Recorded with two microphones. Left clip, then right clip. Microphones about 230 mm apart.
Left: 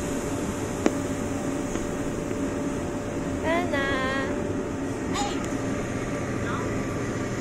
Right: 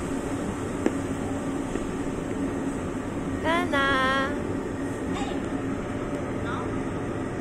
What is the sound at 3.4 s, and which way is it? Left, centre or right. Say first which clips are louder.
Vehicle: right 2 dB; right.